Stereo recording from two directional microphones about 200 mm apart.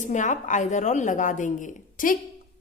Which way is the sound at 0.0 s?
40° left (ahead or behind).